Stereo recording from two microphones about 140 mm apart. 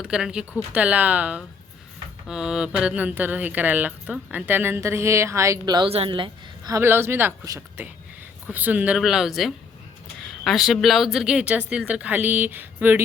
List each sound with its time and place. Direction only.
0.0 s speech: 5° right (ahead or behind); by 5.9 s 30° right (ahead or behind)
5.9 s a woman's voice: 40° right (ahead or behind)
6.7 s speech: 15° right (ahead or behind)